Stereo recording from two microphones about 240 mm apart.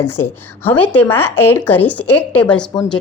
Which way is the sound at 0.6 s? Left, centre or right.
Centre.